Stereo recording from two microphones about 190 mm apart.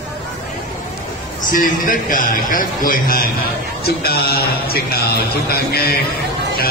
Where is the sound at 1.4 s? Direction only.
45° left (ahead or behind).